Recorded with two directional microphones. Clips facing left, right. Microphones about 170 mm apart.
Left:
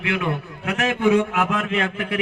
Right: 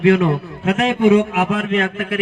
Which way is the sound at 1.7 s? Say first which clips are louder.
Right 4 dB; 15° left (ahead or behind).